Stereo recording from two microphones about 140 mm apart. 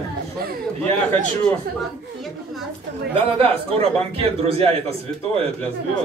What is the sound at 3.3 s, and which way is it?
A man's voice, 40° right (ahead or behind).